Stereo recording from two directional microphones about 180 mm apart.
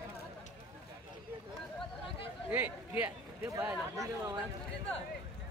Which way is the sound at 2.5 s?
10° right (ahead or behind).